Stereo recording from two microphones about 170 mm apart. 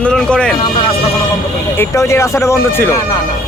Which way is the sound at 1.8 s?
15° left (ahead or behind).